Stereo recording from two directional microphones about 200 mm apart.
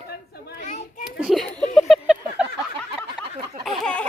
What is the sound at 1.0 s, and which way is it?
Speech, centre (ahead or behind).